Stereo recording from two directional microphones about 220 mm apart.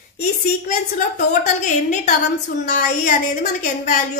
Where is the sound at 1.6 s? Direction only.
35° left (ahead or behind).